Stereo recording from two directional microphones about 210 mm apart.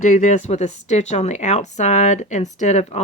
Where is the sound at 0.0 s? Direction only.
35° left (ahead or behind).